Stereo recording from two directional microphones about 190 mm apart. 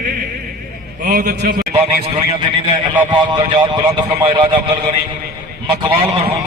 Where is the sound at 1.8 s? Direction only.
25° right (ahead or behind).